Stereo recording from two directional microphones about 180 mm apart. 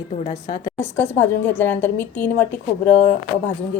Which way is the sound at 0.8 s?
10° left (ahead or behind).